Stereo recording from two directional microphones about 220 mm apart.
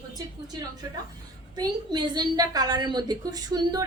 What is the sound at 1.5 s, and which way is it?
A woman's voice, 20° right (ahead or behind).